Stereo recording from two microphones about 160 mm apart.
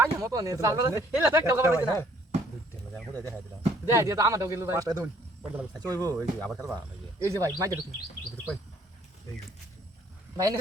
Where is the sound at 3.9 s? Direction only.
20° right (ahead or behind).